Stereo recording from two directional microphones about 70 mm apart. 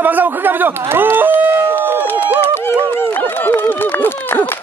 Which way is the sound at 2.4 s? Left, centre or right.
Left.